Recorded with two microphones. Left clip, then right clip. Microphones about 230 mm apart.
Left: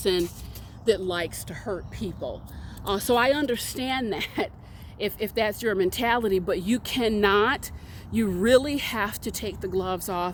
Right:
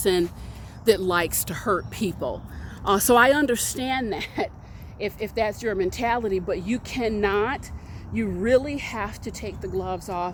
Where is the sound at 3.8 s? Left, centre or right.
Centre.